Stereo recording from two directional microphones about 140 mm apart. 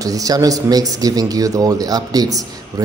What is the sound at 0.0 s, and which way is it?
Speech, 25° right (ahead or behind).